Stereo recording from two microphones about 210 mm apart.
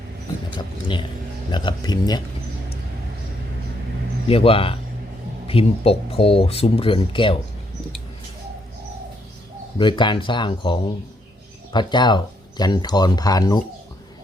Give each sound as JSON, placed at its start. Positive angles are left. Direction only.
{"t": 0.5, "sound": "speech", "side_deg": 20}
{"t": 4.3, "sound": "speech", "side_deg": 25}
{"t": 9.7, "sound": "speech", "side_deg": 20}